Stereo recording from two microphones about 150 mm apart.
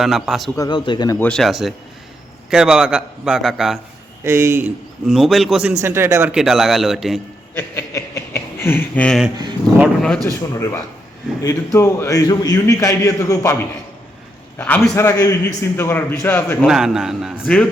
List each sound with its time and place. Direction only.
0.0 s a man's voice: centre (ahead or behind)
0.5 s a man's voice: 25° left (ahead or behind)
1.2 s a man's voice: 5° left (ahead or behind)
4.2 s speech: 20° right (ahead or behind)
5.0 s a man's voice: centre (ahead or behind)
5.8 s speech: 15° right (ahead or behind)
6.3 s a man's voice: centre (ahead or behind)
7.5 s a man's voice: 15° left (ahead or behind)
10.2 s a man's voice: 20° left (ahead or behind)
14.6 s a man's voice: 10° left (ahead or behind)
16.6 s a man's voice: 5° right (ahead or behind)
17.4 s a man's voice: 10° left (ahead or behind)